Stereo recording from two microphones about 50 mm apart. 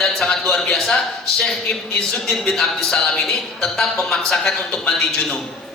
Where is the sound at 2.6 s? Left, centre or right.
Centre.